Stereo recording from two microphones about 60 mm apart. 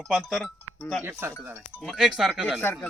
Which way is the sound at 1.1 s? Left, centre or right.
Right.